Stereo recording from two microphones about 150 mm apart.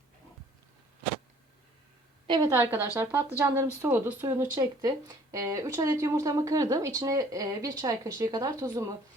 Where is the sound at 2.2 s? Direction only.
30° right (ahead or behind).